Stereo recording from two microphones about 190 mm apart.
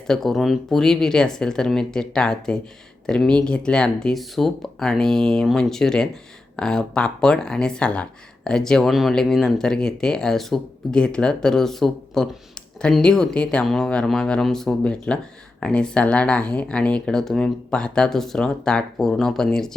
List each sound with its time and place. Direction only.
0.1 s speech: centre (ahead or behind)